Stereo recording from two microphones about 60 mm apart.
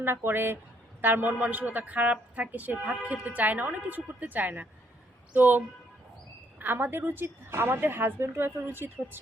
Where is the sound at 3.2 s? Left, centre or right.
Right.